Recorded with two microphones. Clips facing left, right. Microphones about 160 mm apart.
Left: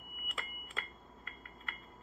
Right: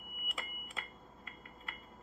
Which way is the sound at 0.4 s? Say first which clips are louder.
Left 1 dB; 10° right (ahead or behind).